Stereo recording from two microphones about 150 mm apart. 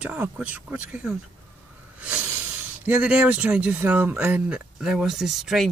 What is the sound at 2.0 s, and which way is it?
Hiss, 10° right (ahead or behind).